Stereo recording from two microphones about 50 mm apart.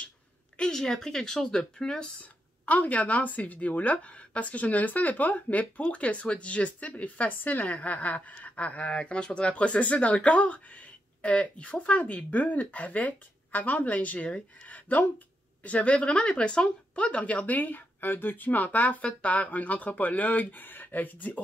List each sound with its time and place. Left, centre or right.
0.6 s speech: centre
2.6 s a woman's voice: left